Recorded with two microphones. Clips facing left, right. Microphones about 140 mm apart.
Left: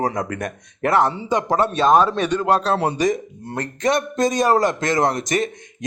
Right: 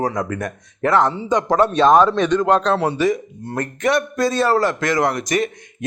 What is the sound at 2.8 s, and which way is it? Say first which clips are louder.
Speech: right 1 dB; 40° left (ahead or behind).